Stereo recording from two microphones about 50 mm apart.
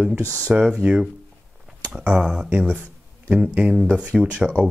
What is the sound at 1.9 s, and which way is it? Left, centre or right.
Speech, right.